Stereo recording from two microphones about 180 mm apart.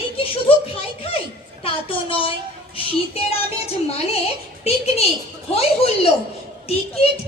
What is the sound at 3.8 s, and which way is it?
A woman's voice, 35° left (ahead or behind).